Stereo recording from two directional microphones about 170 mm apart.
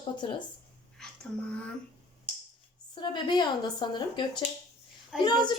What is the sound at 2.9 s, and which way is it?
A woman's voice, 25° left (ahead or behind).